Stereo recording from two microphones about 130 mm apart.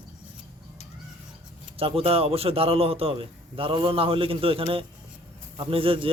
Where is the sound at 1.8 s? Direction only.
45° right (ahead or behind).